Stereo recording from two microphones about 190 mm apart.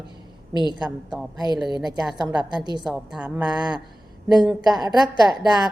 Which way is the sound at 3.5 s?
20° right (ahead or behind).